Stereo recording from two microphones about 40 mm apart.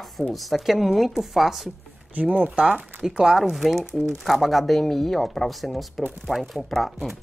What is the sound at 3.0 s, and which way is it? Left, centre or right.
Speech, centre.